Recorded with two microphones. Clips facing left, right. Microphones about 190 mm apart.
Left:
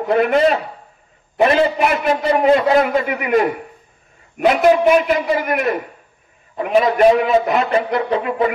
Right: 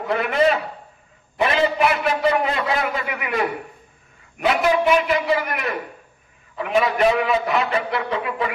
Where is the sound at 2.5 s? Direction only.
45° left (ahead or behind).